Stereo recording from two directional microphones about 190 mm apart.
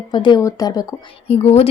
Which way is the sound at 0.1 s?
25° left (ahead or behind).